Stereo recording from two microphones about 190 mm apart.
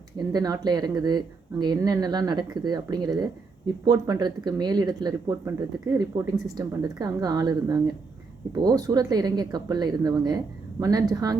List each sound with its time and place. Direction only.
0.3 s speech: 20° right (ahead or behind)